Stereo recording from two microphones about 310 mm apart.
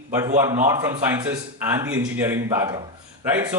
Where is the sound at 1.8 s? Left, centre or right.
Centre.